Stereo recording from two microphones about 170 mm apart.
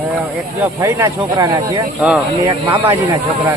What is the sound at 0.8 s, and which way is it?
Speech, 20° right (ahead or behind).